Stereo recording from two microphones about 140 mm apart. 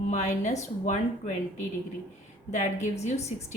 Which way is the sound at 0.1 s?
55° left (ahead or behind).